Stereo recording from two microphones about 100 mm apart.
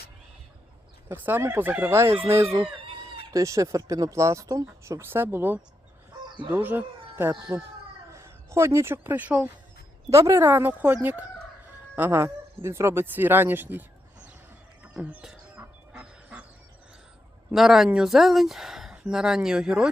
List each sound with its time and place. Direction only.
1.0 s speech: 20° right (ahead or behind)
2.8 s chicken: 60° right (ahead or behind)
3.3 s speech: 35° right (ahead or behind); by 9.5 s 15° right (ahead or behind)
10.1 s speech: 30° right (ahead or behind)
10.4 s speech: 20° right (ahead or behind)
15.1 s speech: 5° right (ahead or behind)
15.9 s goose: 10° right (ahead or behind)
17.5 s speech: 5° right (ahead or behind)